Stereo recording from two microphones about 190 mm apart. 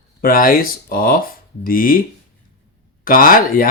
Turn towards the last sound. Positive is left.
turn(degrees=50)  # may be behind; listen again after turning